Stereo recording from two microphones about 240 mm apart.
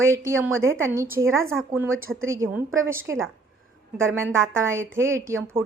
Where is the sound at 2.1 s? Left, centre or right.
Right.